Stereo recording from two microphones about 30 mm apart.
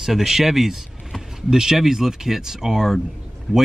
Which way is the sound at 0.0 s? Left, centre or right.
Centre.